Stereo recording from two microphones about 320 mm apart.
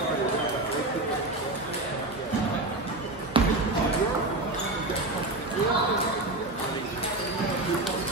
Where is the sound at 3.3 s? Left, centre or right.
Centre.